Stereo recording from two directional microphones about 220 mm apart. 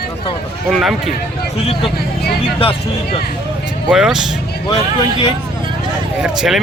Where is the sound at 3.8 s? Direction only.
5° right (ahead or behind).